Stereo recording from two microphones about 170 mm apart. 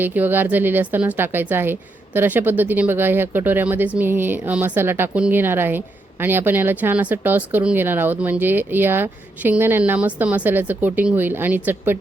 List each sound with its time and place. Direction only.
0.0 s a woman's voice: 10° right (ahead or behind)